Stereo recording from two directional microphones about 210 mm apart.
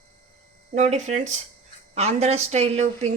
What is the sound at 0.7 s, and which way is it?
A woman's voice, 35° right (ahead or behind).